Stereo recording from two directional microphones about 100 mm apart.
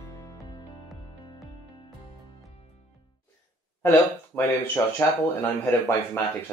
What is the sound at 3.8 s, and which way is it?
Speech, 20° left (ahead or behind).